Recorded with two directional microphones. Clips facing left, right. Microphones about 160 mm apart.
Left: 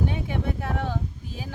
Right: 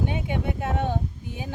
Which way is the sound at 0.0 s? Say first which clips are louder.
Even; 20° right (ahead or behind).